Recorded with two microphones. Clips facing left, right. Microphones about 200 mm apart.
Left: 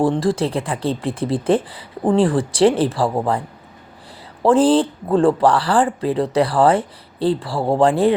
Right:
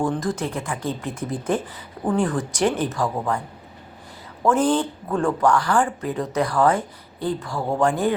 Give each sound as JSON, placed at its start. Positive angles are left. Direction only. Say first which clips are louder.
{"t": 0.0, "sound": "speech", "louder": "left 6 dB", "side_deg": 30}
{"t": 4.4, "sound": "speech", "louder": "left 6 dB", "side_deg": 30}